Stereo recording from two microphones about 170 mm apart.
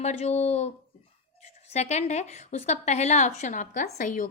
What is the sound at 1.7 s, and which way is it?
A woman's voice, 40° left (ahead or behind).